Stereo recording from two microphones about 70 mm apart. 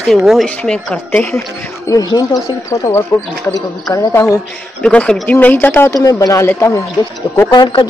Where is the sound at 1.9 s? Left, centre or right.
Left.